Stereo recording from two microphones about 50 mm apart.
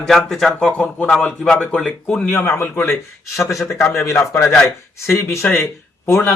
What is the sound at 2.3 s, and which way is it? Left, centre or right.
Speech, left.